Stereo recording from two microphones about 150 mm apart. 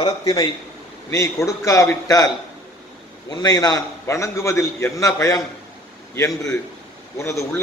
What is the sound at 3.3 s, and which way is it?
A man's voice, 25° left (ahead or behind).